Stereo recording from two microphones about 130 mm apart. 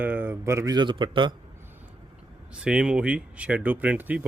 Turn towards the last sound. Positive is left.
turn(degrees=-15)  # may be behind; listen again after turning